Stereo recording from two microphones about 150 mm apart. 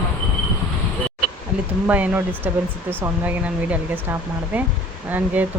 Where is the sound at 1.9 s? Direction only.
10° right (ahead or behind).